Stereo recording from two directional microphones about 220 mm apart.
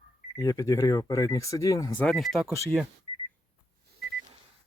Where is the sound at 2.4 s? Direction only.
15° left (ahead or behind).